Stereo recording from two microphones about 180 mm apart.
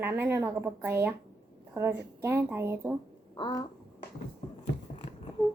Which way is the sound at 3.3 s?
25° left (ahead or behind).